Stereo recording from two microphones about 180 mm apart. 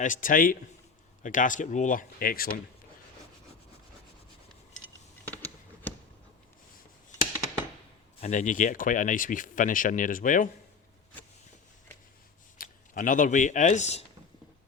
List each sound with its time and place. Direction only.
0.0 s speech: 45° left (ahead or behind)
8.2 s speech: 45° left (ahead or behind)
12.5 s speech: 50° left (ahead or behind)